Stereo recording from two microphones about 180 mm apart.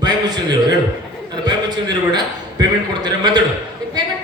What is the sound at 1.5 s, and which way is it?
A man's voice, 25° right (ahead or behind).